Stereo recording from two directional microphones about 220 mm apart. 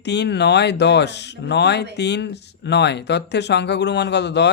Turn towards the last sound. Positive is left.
turn(degrees=50)  # may be behind; listen again after turning